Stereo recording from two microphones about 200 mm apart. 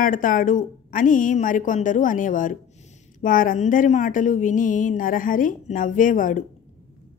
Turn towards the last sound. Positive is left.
turn(degrees=40)  # may be behind; listen again after turning